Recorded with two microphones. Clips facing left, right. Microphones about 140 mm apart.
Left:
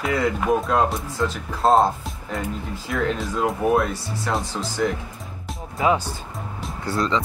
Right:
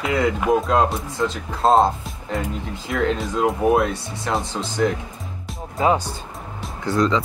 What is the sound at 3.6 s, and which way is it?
Speech, 20° right (ahead or behind).